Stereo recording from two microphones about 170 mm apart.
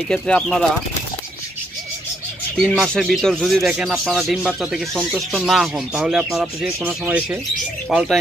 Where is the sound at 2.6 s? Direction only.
5° left (ahead or behind).